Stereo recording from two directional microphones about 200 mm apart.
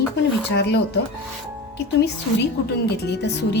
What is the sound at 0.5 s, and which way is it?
Speech, 55° left (ahead or behind).